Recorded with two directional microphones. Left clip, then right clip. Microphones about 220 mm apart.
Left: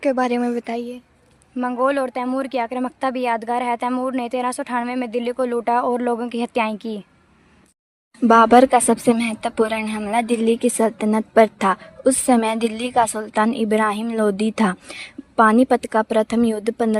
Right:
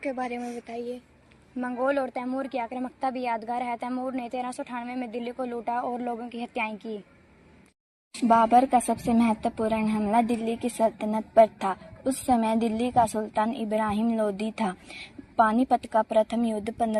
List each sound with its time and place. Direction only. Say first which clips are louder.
0.0 s speech: left 12 dB; 55° left (ahead or behind)
1.5 s speech: left 7 dB; 40° left (ahead or behind)
8.3 s a woman's voice: left 8 dB; 50° left (ahead or behind)